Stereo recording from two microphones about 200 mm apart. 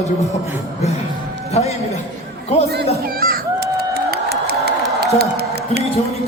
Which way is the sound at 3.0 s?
50° right (ahead or behind).